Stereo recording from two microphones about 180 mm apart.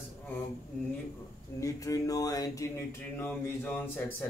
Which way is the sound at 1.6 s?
20° left (ahead or behind).